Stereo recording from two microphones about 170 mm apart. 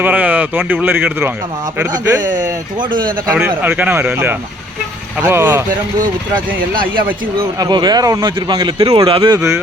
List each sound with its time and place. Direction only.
0.0 s speech: 10° right (ahead or behind)
2.2 s speech: 50° right (ahead or behind)
2.7 s speech: 25° right (ahead or behind)
3.3 s speech: 10° right (ahead or behind)
7.6 s speech: 25° right (ahead or behind)